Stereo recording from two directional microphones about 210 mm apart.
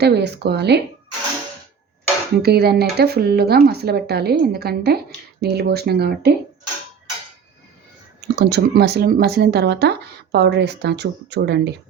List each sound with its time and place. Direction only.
0.0 s speech: 50° right (ahead or behind)
2.4 s speech: 50° right (ahead or behind)
8.4 s speech: 50° right (ahead or behind)